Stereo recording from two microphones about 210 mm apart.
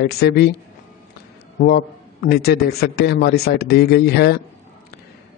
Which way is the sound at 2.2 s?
50° left (ahead or behind).